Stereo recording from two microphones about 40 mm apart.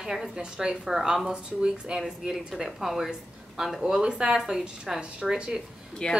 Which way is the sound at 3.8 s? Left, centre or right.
Centre.